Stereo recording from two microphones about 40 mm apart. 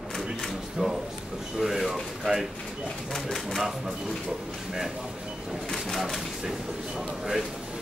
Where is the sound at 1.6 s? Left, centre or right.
Centre.